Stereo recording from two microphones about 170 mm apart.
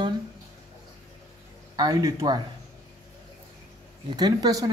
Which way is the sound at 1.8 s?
20° right (ahead or behind).